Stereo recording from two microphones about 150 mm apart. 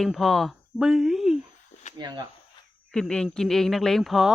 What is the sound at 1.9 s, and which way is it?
Speech, 25° right (ahead or behind).